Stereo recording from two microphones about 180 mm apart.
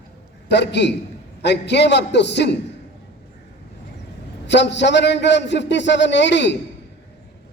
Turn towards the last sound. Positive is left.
turn(degrees=80)